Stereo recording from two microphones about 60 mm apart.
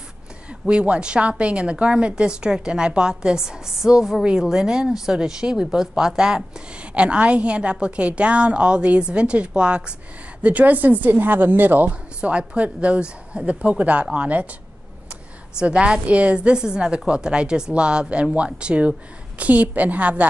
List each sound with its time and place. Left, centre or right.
0.5 s a woman's voice: centre
12.2 s a woman's voice: centre
15.7 s a woman's voice: centre